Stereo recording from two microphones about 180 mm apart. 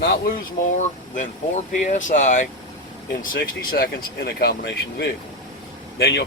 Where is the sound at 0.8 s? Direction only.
45° left (ahead or behind).